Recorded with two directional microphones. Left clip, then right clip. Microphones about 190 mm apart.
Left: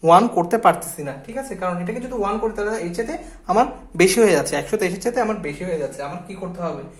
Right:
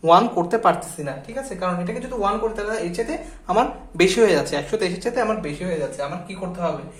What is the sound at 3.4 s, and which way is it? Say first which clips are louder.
Speech: left 2 dB; 30° left (ahead or behind).